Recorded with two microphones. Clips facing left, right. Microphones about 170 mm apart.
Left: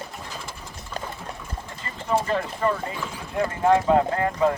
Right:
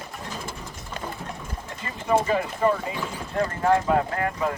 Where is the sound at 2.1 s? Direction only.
10° right (ahead or behind).